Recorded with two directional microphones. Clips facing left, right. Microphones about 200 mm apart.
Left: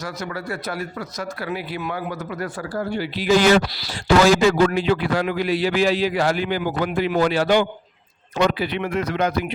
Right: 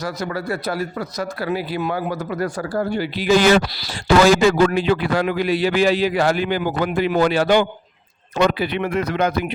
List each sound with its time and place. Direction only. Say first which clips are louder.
0.0 s a man's voice: right 4 dB; 35° right (ahead or behind); by 9.4 s 55° right (ahead or behind)